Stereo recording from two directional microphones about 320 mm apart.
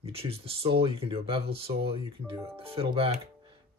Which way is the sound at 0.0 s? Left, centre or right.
Centre.